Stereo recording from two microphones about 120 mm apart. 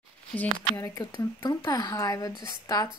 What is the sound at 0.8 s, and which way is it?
Speech, 35° left (ahead or behind).